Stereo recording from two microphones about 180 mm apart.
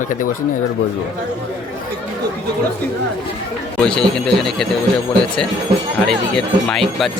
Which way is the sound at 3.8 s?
5° left (ahead or behind).